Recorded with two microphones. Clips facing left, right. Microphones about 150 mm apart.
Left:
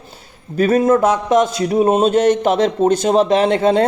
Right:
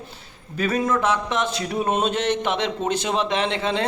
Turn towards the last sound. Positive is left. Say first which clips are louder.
# left 10 dB
turn(degrees=45)  # may be behind; listen again after turning